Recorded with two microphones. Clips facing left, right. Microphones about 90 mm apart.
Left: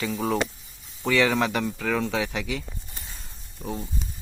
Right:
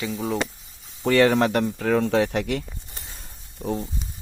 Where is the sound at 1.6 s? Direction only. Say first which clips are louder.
Right 4 dB; 30° right (ahead or behind).